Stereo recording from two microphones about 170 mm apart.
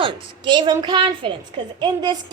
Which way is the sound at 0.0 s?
30° right (ahead or behind).